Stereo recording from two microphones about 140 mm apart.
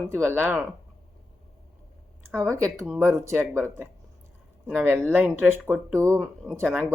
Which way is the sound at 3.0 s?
20° right (ahead or behind).